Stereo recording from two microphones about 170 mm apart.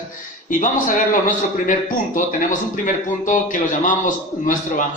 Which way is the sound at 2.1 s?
50° left (ahead or behind).